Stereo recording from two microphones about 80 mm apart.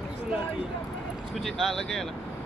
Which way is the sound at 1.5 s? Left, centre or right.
Centre.